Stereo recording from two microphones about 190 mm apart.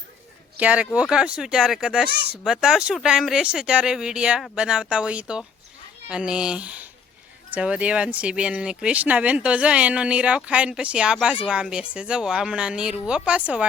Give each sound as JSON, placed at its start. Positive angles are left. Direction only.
{"t": 0.5, "sound": "speech", "side_deg": -5}
{"t": 2.0, "sound": "speech", "side_deg": -60}
{"t": 2.4, "sound": "speech", "side_deg": -5}